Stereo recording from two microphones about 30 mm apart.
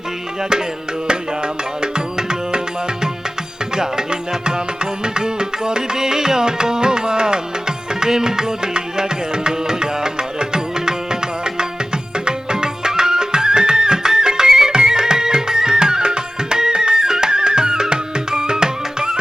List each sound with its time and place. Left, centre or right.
1.8 s music: right
3.8 s music: right
7.9 s tabla: right
12.1 s music: right